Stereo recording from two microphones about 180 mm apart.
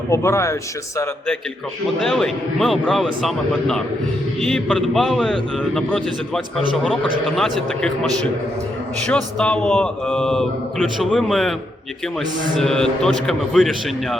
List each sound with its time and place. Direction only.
0.1 s speech: 15° left (ahead or behind)
2.0 s a man's voice: 5° left (ahead or behind)
12.5 s a man's voice: 5° left (ahead or behind)